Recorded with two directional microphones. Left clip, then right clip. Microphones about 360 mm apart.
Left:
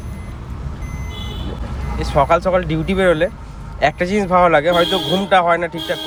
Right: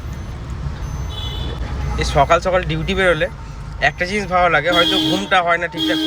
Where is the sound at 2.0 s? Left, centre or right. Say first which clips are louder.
Even; centre.